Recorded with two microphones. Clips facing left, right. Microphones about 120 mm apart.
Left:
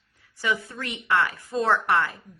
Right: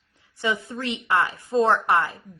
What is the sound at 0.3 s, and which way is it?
A woman's voice, 25° right (ahead or behind).